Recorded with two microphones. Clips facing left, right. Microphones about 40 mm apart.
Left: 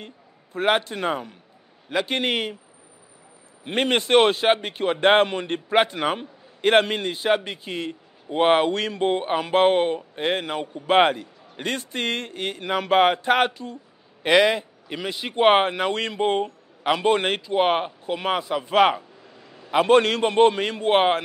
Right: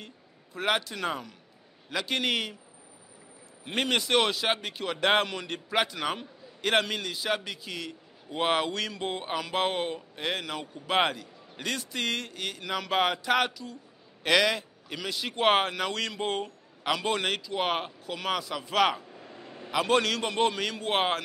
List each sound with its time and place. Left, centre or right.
0.0 s a man's voice: left
3.7 s a man's voice: left
14.2 s a man's voice: left
19.3 s a sound: right
19.7 s a man's voice: left